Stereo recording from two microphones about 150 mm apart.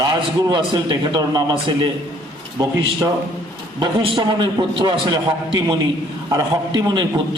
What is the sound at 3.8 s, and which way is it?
A man's voice, 30° right (ahead or behind).